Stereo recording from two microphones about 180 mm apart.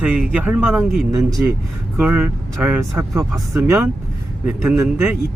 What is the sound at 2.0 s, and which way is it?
Speech, 10° right (ahead or behind).